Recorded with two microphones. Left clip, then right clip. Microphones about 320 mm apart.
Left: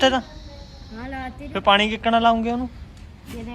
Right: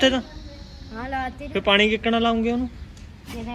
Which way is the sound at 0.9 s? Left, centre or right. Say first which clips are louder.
Right 5 dB; centre.